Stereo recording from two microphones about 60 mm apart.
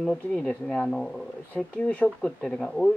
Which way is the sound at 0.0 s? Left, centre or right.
Centre.